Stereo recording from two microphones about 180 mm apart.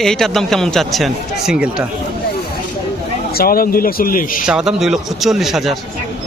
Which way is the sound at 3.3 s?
55° left (ahead or behind).